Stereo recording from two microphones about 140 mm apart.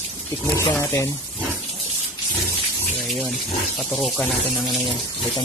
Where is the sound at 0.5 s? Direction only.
20° left (ahead or behind).